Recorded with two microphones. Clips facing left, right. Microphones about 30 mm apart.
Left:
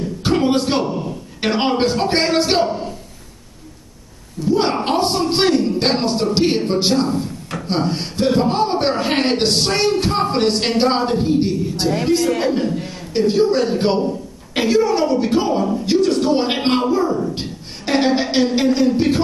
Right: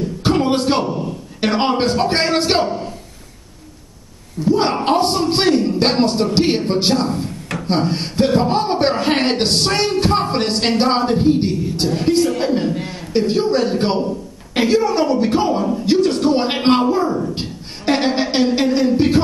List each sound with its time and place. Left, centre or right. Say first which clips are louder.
0.2 s a sound: even; centre
0.8 s a man's voice: right 1 dB; centre
4.5 s a man's voice: right 1 dB; centre